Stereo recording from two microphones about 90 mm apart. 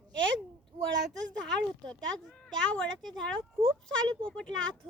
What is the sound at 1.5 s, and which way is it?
Speech, 5° left (ahead or behind).